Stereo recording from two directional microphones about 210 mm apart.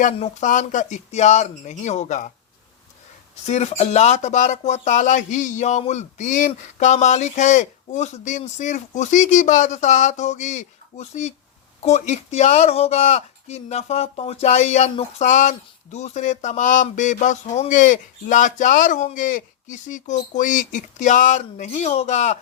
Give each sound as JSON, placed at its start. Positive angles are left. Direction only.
{"t": 0.0, "sound": "speech", "side_deg": 35}
{"t": 3.4, "sound": "speech", "side_deg": 30}